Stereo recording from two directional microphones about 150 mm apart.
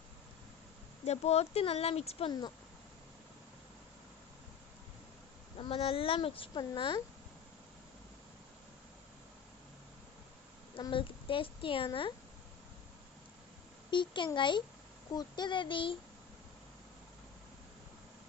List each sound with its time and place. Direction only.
1.0 s speech: 45° left (ahead or behind)
5.5 s speech: 40° left (ahead or behind)
10.8 s speech: 35° left (ahead or behind)
13.9 s speech: 30° left (ahead or behind)